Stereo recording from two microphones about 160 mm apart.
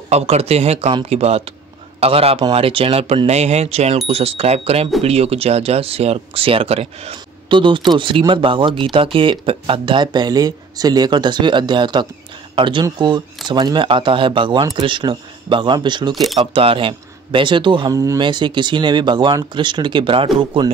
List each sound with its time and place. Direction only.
0.1 s speech: 40° right (ahead or behind)